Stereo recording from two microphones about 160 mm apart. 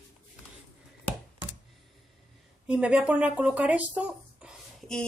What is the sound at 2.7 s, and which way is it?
Speech, 5° right (ahead or behind).